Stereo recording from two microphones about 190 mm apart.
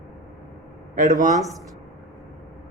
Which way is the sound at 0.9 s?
40° right (ahead or behind).